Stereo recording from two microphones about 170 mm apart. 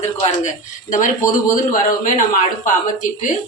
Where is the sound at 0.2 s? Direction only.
45° left (ahead or behind).